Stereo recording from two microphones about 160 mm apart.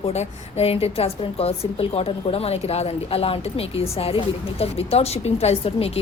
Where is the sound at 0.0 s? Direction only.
40° left (ahead or behind).